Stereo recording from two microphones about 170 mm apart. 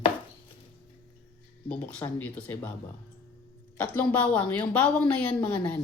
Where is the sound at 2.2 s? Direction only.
10° left (ahead or behind).